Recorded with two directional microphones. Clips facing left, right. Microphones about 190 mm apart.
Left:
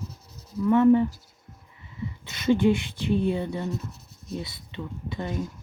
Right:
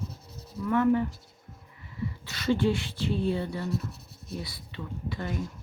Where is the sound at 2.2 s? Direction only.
20° left (ahead or behind).